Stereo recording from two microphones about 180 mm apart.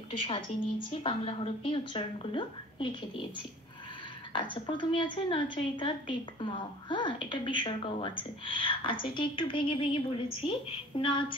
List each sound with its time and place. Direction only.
0.1 s a woman's voice: 30° left (ahead or behind)
4.3 s a woman's voice: 25° left (ahead or behind)